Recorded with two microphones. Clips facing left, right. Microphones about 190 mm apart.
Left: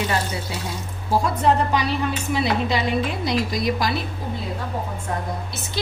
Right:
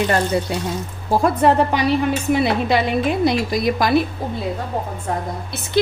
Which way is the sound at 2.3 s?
55° right (ahead or behind).